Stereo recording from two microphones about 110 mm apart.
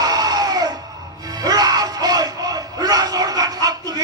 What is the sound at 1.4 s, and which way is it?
Crowd, 35° right (ahead or behind).